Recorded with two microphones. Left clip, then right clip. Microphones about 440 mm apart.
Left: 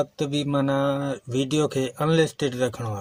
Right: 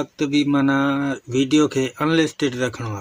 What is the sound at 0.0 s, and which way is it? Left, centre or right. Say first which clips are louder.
Speech: right 5 dB; left.